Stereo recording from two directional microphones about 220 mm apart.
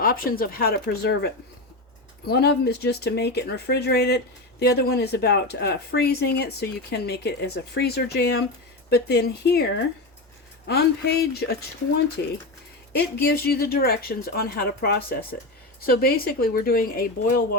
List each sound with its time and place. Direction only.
0.0 s speech: 40° left (ahead or behind)